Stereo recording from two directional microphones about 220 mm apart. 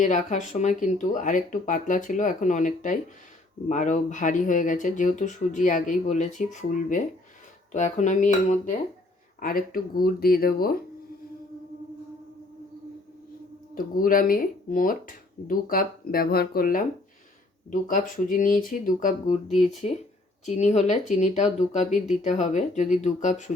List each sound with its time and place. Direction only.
0.0 s speech: 35° left (ahead or behind)
13.7 s speech: 40° left (ahead or behind)
19.5 s speech: centre (ahead or behind)
20.4 s speech: 30° left (ahead or behind)